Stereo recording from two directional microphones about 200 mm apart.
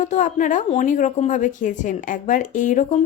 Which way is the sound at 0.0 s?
40° left (ahead or behind).